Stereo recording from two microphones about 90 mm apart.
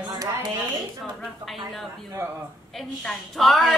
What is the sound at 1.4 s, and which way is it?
Speech, centre (ahead or behind).